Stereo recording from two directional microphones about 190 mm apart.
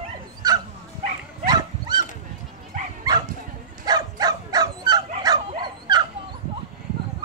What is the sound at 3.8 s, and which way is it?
Bow-wow, 20° right (ahead or behind).